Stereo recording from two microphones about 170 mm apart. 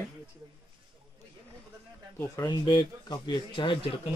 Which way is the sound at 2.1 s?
15° left (ahead or behind).